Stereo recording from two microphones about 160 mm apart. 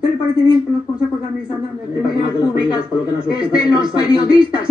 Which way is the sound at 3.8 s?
5° right (ahead or behind).